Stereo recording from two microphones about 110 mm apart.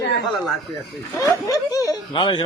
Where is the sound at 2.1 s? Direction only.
45° left (ahead or behind).